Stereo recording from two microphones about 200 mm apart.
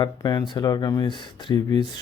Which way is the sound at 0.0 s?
20° left (ahead or behind).